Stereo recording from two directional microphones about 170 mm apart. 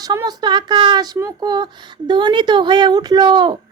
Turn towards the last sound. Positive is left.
turn(degrees=-30)  # may be behind; listen again after turning